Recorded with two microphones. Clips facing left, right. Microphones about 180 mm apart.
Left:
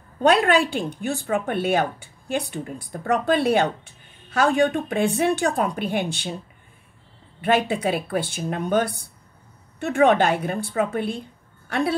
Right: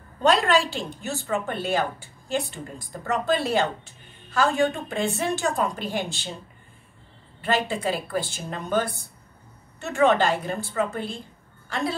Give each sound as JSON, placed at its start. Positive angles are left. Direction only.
{"t": 0.5, "sound": "speech", "side_deg": 55}
{"t": 7.4, "sound": "speech", "side_deg": 60}